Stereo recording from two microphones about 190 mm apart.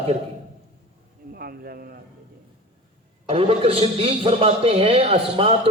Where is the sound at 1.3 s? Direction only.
50° right (ahead or behind).